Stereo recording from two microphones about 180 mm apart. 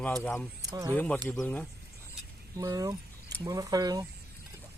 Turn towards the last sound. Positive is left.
turn(degrees=-20)  # may be behind; listen again after turning